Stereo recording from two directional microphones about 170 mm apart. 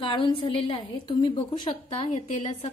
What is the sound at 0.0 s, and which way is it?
A woman's voice, 30° left (ahead or behind).